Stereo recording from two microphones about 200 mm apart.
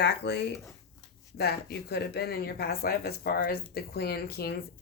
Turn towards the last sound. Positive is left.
turn(degrees=50)  # may be behind; listen again after turning